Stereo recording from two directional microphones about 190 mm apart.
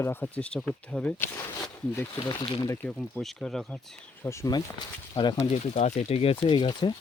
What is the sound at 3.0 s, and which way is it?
Speech, 5° left (ahead or behind).